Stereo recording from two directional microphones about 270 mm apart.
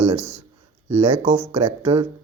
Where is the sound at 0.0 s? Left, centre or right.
Right.